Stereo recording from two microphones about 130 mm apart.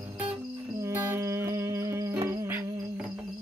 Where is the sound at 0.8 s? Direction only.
15° right (ahead or behind).